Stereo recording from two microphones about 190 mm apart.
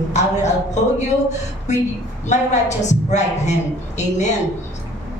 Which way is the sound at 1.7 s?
40° left (ahead or behind).